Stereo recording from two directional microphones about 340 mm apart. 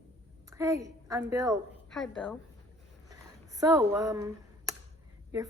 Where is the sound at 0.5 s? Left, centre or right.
Centre.